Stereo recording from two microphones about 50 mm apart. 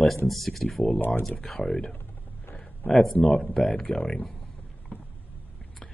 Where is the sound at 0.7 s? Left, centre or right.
Left.